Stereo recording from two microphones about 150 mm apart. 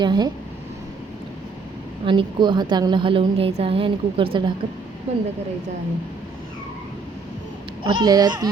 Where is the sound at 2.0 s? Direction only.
35° right (ahead or behind).